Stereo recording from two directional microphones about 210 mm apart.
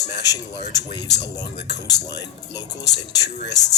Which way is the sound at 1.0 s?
55° left (ahead or behind).